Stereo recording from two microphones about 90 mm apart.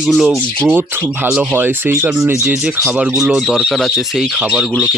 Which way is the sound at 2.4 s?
10° right (ahead or behind).